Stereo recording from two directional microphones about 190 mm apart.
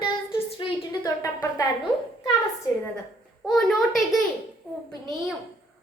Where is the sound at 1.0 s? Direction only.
15° left (ahead or behind).